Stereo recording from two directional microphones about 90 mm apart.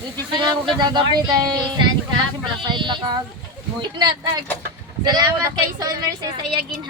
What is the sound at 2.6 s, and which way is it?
A woman's voice, 60° right (ahead or behind).